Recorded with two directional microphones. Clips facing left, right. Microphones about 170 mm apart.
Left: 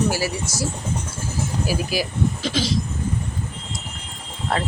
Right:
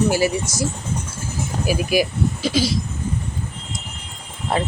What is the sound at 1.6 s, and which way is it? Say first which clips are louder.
Speech: right 7 dB; 15° right (ahead or behind).